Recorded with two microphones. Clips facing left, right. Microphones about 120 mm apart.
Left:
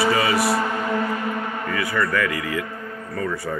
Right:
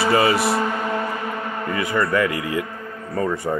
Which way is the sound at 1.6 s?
25° right (ahead or behind).